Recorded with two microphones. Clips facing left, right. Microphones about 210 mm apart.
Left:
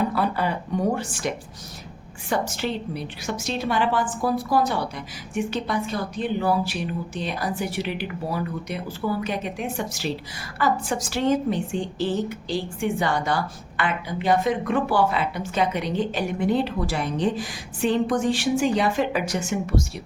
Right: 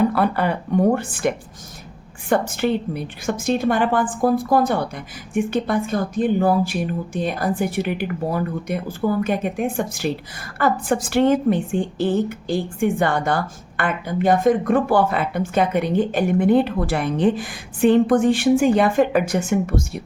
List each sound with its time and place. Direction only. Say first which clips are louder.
0.1 s speech: right 4 dB; 60° right (ahead or behind)
2.3 s a woman's voice: right 6 dB; 55° right (ahead or behind)